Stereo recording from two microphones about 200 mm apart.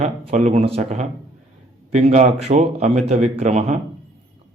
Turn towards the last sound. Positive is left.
turn(degrees=-35)  # may be behind; listen again after turning